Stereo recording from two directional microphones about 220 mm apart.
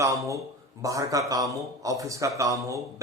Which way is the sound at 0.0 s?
15° right (ahead or behind).